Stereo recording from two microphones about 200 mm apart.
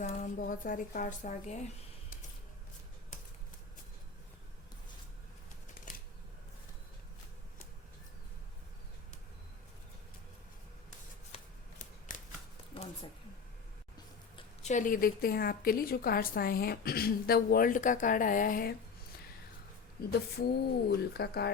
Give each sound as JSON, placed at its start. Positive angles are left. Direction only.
{"t": 0.0, "sound": "speech", "side_deg": 35}
{"t": 12.1, "sound": "shuffling cards", "side_deg": 40}
{"t": 12.7, "sound": "a sound", "side_deg": 30}
{"t": 14.3, "sound": "a woman's voice", "side_deg": 35}
{"t": 20.1, "sound": "a woman's voice", "side_deg": 50}